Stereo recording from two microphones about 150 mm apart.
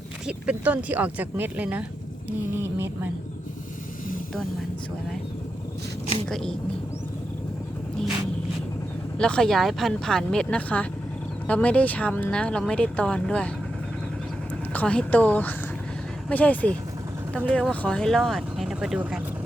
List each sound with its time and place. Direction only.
0.3 s speech: 10° right (ahead or behind)
6.2 s speech: 5° left (ahead or behind)
9.1 s speech: 5° left (ahead or behind)
14.7 s speech: 10° left (ahead or behind)